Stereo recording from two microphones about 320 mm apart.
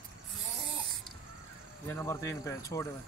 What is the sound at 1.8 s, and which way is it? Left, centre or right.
Speech, centre.